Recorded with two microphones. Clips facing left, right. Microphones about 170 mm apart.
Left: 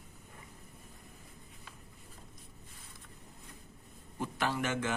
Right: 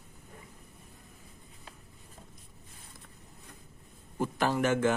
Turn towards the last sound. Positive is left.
turn(degrees=-45)  # may be behind; listen again after turning